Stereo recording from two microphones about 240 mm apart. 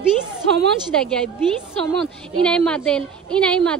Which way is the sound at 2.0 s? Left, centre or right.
Centre.